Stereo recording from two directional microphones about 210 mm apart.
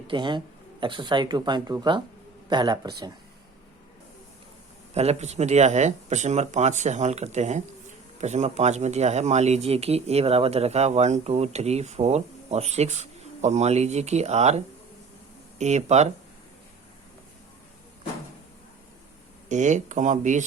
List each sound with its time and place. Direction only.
0.1 s speech: 20° right (ahead or behind)
4.9 s speech: 30° right (ahead or behind)
19.5 s speech: 35° right (ahead or behind)